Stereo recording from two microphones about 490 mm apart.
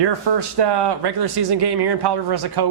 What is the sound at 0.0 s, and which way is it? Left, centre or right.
Speech, right.